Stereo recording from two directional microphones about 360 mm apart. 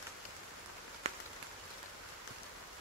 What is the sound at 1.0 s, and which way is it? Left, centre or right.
Rain on surface, centre.